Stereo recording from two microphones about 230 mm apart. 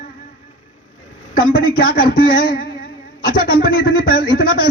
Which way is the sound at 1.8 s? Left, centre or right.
Left.